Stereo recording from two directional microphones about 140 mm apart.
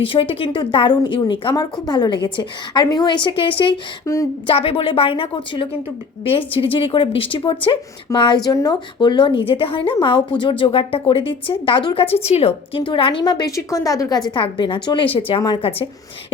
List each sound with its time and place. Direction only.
0.0 s a woman's voice: 40° left (ahead or behind)
4.0 s speech: 20° left (ahead or behind)
4.4 s a woman's voice: 40° left (ahead or behind); by 14.2 s 25° left (ahead or behind)
14.3 s a woman's voice: 35° left (ahead or behind)